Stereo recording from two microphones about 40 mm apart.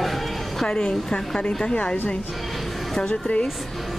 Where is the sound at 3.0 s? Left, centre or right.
Left.